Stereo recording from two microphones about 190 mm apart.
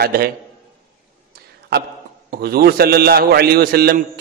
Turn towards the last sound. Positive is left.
turn(degrees=-55)  # may be behind; listen again after turning